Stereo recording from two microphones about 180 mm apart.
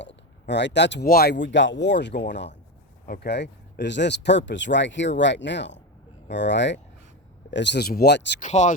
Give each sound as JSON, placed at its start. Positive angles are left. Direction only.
{"t": 0.0, "sound": "speech", "side_deg": 75}
{"t": 8.4, "sound": "speech", "side_deg": 40}